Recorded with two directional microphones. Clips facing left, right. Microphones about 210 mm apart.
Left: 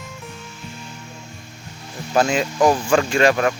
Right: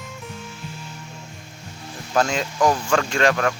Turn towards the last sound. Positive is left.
turn(degrees=10)  # may be behind; listen again after turning